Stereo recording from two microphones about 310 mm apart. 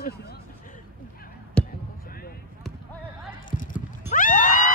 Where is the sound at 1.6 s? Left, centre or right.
Centre.